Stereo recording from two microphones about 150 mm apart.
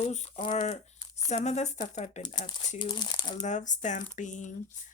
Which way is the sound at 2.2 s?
30° left (ahead or behind).